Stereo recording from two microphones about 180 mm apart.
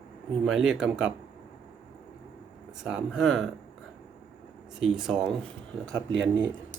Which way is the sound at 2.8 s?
5° right (ahead or behind).